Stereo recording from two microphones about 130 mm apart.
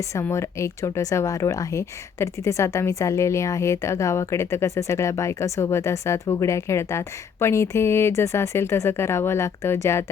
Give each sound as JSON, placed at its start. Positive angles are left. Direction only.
{"t": 0.2, "sound": "speech", "side_deg": 20}